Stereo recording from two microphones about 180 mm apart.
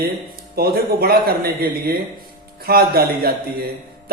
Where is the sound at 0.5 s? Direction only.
55° right (ahead or behind).